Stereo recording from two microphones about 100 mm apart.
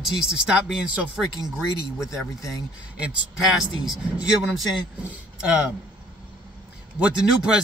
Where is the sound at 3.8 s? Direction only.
5° right (ahead or behind).